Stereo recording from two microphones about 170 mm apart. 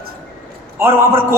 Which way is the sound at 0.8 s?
15° right (ahead or behind).